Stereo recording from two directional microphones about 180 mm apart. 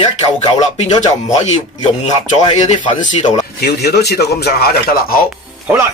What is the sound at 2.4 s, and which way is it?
Speech, 35° left (ahead or behind).